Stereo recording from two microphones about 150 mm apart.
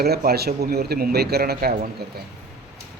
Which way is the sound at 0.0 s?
90° right.